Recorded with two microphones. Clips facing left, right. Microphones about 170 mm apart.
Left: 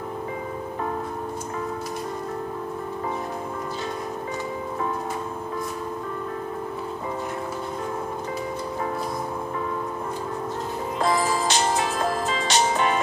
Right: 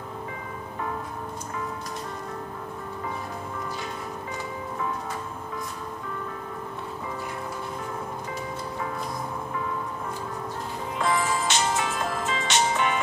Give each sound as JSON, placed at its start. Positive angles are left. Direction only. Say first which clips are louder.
{"t": 11.0, "sound": "music", "louder": "left 2 dB", "side_deg": 35}